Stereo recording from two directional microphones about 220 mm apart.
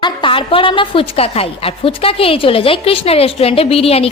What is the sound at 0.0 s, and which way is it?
A woman's voice, 20° left (ahead or behind).